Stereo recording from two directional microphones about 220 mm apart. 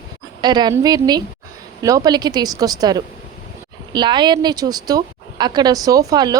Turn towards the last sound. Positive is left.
turn(degrees=-15)  # may be behind; listen again after turning